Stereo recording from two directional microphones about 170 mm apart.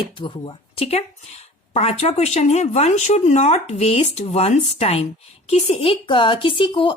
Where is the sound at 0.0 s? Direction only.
30° left (ahead or behind).